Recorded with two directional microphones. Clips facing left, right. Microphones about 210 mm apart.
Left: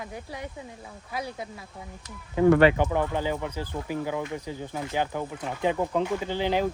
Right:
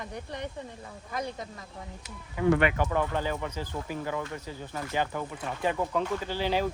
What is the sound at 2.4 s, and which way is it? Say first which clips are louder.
Speech: left 6 dB; 30° left (ahead or behind).